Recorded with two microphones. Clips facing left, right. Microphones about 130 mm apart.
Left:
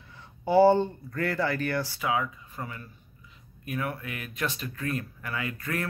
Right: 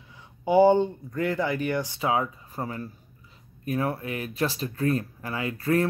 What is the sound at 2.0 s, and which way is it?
Speech, 30° right (ahead or behind).